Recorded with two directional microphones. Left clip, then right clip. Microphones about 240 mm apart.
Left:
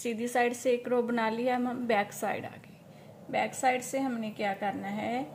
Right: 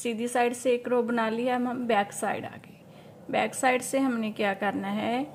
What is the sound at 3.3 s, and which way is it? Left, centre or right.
A woman's voice, right.